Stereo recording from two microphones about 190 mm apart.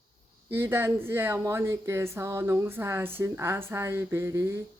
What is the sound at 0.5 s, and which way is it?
Speech, 10° right (ahead or behind).